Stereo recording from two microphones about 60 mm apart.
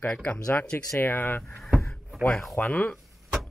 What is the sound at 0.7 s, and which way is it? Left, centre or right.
Speech, left.